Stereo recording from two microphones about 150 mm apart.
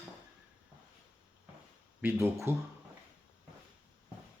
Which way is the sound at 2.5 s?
15° right (ahead or behind).